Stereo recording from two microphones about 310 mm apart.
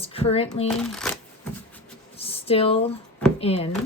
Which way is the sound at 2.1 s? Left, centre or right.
Centre.